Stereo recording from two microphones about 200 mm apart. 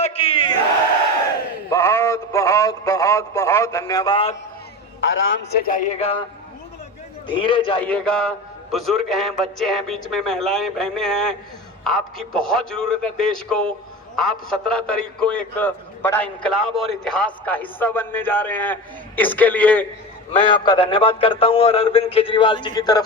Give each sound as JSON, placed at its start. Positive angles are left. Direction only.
{"t": 0.0, "sound": "a man's voice", "side_deg": 30}
{"t": 1.7, "sound": "a sound", "side_deg": 15}
{"t": 4.9, "sound": "a man's voice", "side_deg": 75}
{"t": 6.0, "sound": "a man's voice", "side_deg": 30}
{"t": 7.3, "sound": "a man's voice", "side_deg": 25}
{"t": 7.8, "sound": "a man's voice", "side_deg": 5}
{"t": 20.3, "sound": "a man's voice", "side_deg": 25}